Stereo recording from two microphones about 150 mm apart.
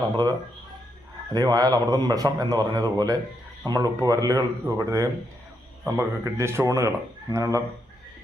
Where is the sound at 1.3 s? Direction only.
25° right (ahead or behind).